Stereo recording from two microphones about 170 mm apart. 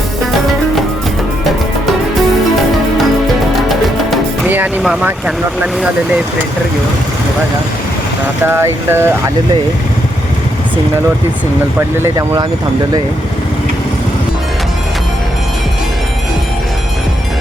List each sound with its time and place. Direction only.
3.7 s music: centre (ahead or behind)
4.4 s music: 10° right (ahead or behind)
4.8 s speech: 5° right (ahead or behind)
8.4 s speech: 15° right (ahead or behind)
11.9 s speech: 20° right (ahead or behind)